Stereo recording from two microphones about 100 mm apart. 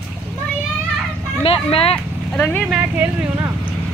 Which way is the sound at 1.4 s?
75° left (ahead or behind).